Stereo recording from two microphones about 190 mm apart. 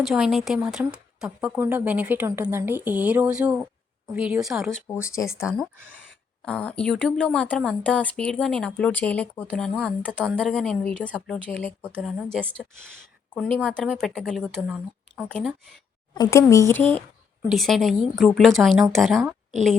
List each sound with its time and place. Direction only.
0.0 s a woman's voice: centre (ahead or behind)
4.9 s speech: 15° left (ahead or behind)
5.4 s speech: 5° right (ahead or behind)
16.1 s speech: 20° left (ahead or behind); by 19.5 s centre (ahead or behind)